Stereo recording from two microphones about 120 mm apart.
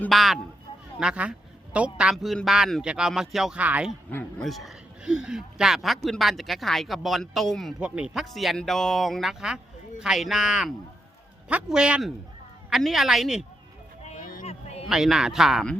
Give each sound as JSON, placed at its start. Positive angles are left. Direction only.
{"t": 0.1, "sound": "a man's voice", "side_deg": 0}
{"t": 2.1, "sound": "a man's voice", "side_deg": 0}
{"t": 4.4, "sound": "a man's voice", "side_deg": 0}
{"t": 14.0, "sound": "a sound", "side_deg": 65}
{"t": 14.8, "sound": "a man's voice", "side_deg": -5}